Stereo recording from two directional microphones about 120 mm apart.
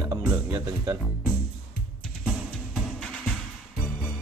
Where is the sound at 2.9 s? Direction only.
5° left (ahead or behind).